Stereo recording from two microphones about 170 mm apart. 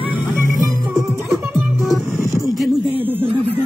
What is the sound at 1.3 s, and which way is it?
Music, centre (ahead or behind).